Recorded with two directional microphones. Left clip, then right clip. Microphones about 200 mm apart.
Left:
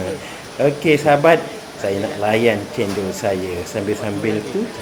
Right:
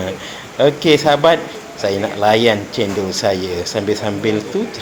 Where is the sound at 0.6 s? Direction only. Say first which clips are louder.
Right 3 dB; 15° right (ahead or behind).